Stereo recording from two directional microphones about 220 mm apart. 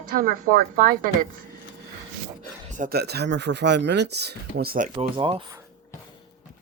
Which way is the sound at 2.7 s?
40° right (ahead or behind).